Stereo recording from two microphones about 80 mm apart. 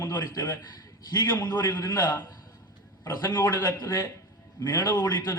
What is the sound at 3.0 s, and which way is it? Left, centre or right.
A man's voice, left.